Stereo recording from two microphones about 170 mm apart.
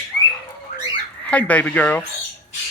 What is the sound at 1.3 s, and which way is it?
Speech, 10° left (ahead or behind).